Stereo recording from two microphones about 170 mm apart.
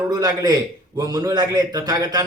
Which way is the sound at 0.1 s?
20° right (ahead or behind).